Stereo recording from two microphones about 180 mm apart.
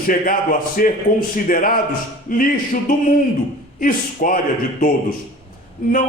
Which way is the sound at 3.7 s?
50° left (ahead or behind).